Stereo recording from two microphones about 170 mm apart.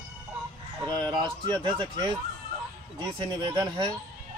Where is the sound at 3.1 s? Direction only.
25° right (ahead or behind).